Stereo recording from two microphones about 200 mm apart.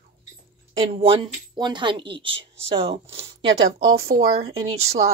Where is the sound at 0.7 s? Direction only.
25° right (ahead or behind).